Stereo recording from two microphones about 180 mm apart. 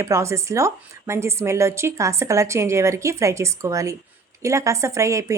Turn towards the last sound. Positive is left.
turn(degrees=-15)  # may be behind; listen again after turning